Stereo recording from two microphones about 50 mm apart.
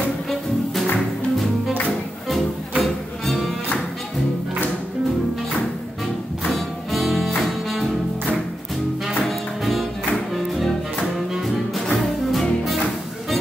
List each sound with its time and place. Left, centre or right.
2.8 s music: centre
6.5 s music: centre
9.0 s music: centre
11.1 s music: centre